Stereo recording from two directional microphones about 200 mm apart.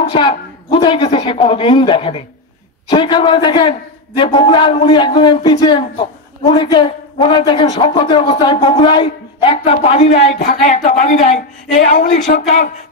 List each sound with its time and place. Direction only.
0.1 s a man's voice: 25° left (ahead or behind); by 12.7 s 40° left (ahead or behind)